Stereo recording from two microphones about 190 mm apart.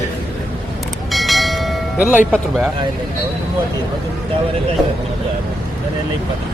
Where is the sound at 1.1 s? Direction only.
Centre (ahead or behind).